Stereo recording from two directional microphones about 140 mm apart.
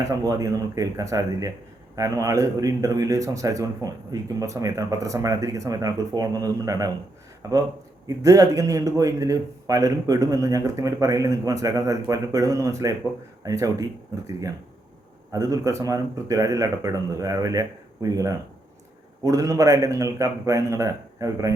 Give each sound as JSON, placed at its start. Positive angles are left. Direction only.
{"t": 0.1, "sound": "a man's voice", "side_deg": -25}
{"t": 15.3, "sound": "a man's voice", "side_deg": -25}